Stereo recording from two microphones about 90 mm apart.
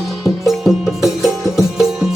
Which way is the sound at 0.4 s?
5° right (ahead or behind).